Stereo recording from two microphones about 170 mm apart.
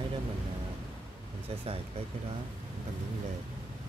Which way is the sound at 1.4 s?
35° right (ahead or behind).